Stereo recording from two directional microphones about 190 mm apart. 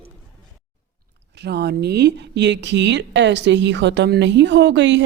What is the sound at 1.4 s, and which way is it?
A woman's voice, 60° right (ahead or behind).